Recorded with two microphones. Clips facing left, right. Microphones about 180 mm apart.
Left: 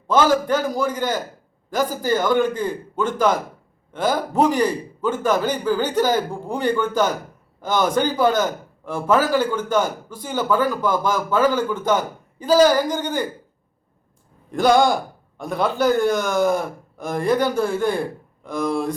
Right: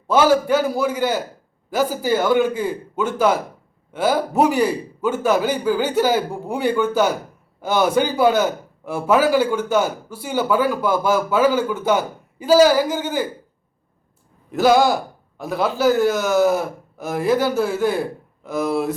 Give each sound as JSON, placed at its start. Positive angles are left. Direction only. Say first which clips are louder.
{"t": 0.1, "sound": "a man's voice", "louder": "right 2 dB", "side_deg": -10}
{"t": 14.5, "sound": "a man's voice", "louder": "right 1 dB", "side_deg": -5}